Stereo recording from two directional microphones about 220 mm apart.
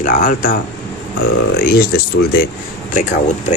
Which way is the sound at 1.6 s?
45° left (ahead or behind).